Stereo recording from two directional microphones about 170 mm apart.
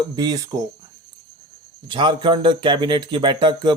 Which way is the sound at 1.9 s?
30° right (ahead or behind).